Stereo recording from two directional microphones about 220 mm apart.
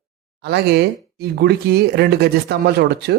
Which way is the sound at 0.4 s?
50° right (ahead or behind).